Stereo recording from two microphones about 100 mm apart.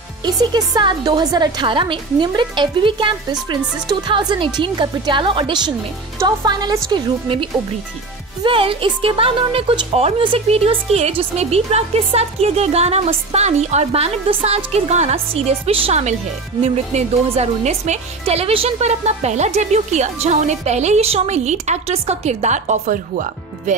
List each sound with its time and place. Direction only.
0.2 s a woman's voice: 45° right (ahead or behind)
8.5 s speech: 65° right (ahead or behind); by 16.0 s 80° right
16.6 s speech: 90° right
18.2 s speech: 80° right